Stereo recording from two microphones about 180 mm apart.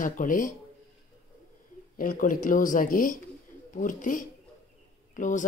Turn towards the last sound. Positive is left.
turn(degrees=45)  # may be behind; listen again after turning